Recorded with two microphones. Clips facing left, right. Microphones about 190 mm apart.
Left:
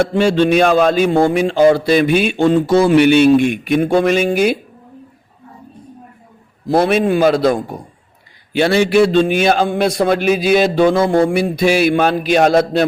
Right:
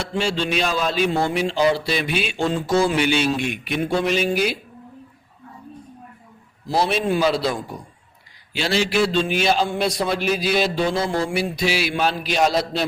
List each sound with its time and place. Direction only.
0.0 s a man's voice: 55° left (ahead or behind)
6.7 s a man's voice: 55° left (ahead or behind)